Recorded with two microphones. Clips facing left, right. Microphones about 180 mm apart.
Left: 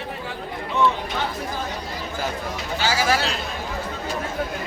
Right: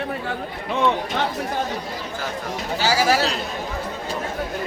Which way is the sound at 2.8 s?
40° right (ahead or behind).